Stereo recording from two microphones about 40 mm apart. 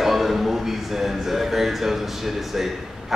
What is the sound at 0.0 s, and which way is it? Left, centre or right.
A man's voice, centre.